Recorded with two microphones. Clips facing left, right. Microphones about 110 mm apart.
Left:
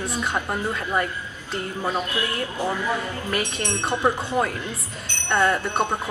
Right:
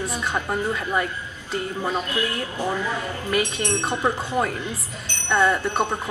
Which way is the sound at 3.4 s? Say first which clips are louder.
Right 3 dB; 15° right (ahead or behind).